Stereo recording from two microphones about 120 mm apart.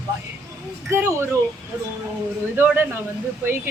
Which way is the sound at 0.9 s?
20° right (ahead or behind).